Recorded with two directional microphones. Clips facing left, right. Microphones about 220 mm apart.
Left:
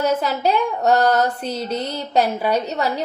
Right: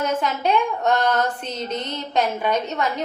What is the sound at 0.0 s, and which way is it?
A woman's voice, 35° left (ahead or behind).